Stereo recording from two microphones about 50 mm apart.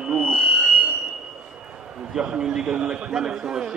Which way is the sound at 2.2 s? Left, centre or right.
Centre.